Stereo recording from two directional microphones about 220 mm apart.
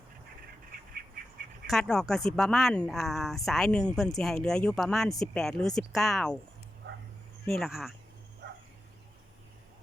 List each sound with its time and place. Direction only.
1.6 s speech: centre (ahead or behind)
7.4 s speech: centre (ahead or behind)
8.4 s bow-wow: 45° right (ahead or behind)